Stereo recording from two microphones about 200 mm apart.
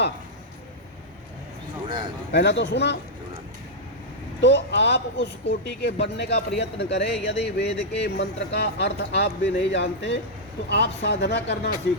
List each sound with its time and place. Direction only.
1.9 s a sound: 25° right (ahead or behind)
2.3 s speech: 60° left (ahead or behind)
4.4 s speech: 60° left (ahead or behind)